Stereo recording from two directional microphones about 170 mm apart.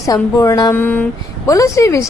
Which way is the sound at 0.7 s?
10° left (ahead or behind).